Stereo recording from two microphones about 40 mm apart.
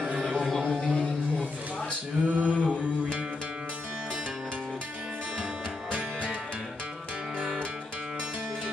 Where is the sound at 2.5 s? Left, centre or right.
Left.